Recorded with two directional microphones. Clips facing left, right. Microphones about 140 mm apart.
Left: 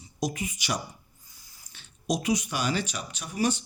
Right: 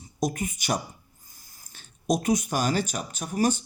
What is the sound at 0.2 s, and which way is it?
Speech, 50° right (ahead or behind).